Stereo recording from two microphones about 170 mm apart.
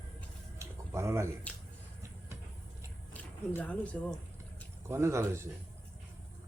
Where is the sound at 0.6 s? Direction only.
15° right (ahead or behind).